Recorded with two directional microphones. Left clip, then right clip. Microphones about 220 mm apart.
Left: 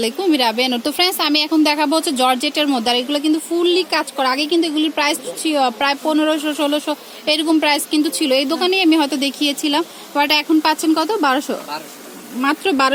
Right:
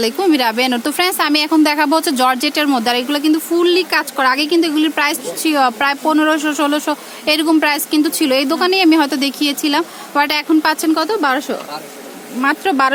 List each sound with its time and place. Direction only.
0.0 s speech: centre (ahead or behind)